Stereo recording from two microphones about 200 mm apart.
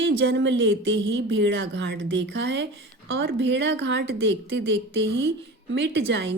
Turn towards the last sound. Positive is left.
turn(degrees=-60)  # may be behind; listen again after turning